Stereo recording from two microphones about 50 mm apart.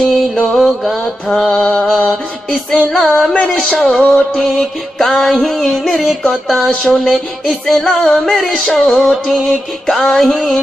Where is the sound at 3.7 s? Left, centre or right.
Centre.